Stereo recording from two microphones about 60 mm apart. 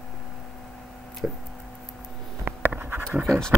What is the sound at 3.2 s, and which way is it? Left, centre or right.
Speech, centre.